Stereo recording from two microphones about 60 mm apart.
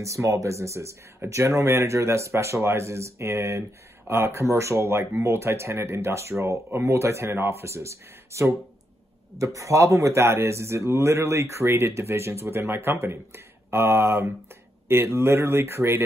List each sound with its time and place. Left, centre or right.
0.0 s speech: right